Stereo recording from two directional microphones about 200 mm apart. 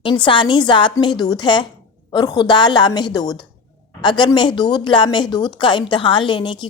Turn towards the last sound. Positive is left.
turn(degrees=25)  # may be behind; listen again after turning